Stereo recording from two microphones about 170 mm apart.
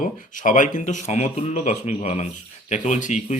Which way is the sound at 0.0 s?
50° left (ahead or behind).